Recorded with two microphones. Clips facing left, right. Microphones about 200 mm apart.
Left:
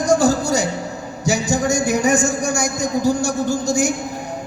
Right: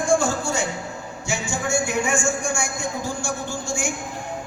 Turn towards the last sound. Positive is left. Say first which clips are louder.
# left 9 dB
turn(degrees=40)  # may be behind; listen again after turning